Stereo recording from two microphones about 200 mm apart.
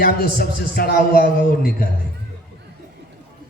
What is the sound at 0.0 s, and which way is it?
A man's voice, 50° left (ahead or behind).